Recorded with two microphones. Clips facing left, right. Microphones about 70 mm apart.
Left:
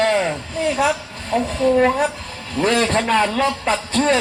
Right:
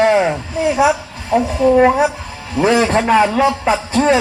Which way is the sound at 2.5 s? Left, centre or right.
Centre.